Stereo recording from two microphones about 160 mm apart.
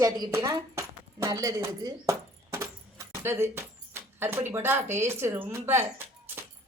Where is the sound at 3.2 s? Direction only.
15° right (ahead or behind).